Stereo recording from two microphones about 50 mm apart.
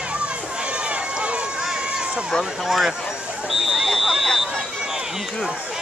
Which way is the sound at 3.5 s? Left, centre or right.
Centre.